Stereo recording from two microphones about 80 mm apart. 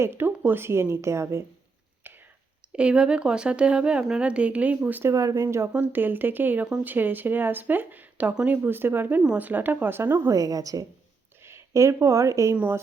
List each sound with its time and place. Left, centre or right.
0.0 s a woman's voice: right
2.0 s whispering: right
2.7 s speech: centre
5.0 s a woman's voice: right
5.7 s speech: right
10.3 s a woman's voice: right
11.4 s speech: right